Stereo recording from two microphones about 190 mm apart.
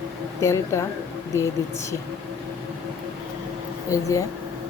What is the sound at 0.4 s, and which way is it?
Speech, 15° left (ahead or behind).